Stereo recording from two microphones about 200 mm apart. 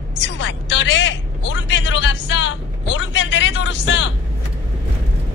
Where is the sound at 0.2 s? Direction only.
65° left (ahead or behind).